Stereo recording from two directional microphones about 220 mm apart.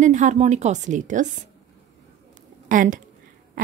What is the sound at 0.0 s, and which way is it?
A woman's voice, 35° right (ahead or behind).